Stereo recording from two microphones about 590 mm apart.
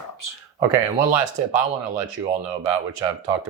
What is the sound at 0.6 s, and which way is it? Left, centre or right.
Speech, right.